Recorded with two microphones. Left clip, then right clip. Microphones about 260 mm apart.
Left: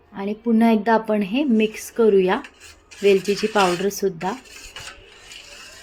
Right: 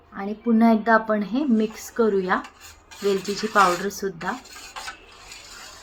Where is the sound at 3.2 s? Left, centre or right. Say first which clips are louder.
Even; left.